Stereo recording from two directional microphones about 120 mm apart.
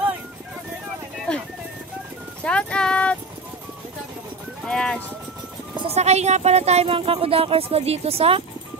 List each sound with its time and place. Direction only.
1.3 s music: 5° left (ahead or behind)
2.4 s clip-clop: 10° left (ahead or behind)
4.6 s speech: 5° left (ahead or behind)
5.9 s speech: 65° right (ahead or behind)